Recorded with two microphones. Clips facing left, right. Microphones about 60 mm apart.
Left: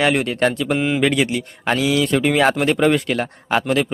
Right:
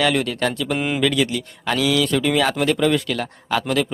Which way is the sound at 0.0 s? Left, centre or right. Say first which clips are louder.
Left 2 dB; left.